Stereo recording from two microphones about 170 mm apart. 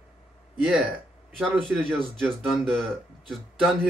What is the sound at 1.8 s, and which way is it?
Speech, 5° left (ahead or behind).